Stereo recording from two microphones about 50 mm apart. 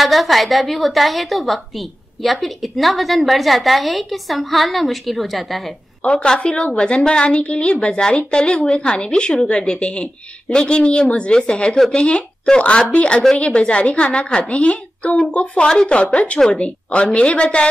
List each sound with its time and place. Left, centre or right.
0.0 s a woman's voice: centre
6.0 s a woman's voice: centre